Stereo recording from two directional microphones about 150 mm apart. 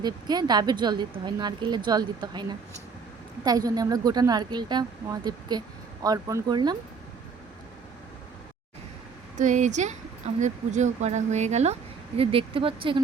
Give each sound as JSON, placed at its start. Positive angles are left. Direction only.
{"t": 0.0, "sound": "speech", "side_deg": -25}
{"t": 9.4, "sound": "speech", "side_deg": -55}